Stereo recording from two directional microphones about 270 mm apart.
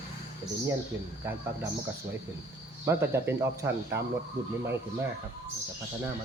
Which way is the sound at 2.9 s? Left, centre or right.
Centre.